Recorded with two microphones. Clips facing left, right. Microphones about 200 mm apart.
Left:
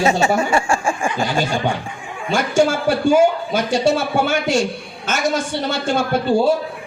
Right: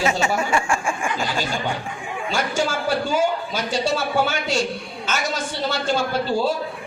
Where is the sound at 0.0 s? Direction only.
30° left (ahead or behind).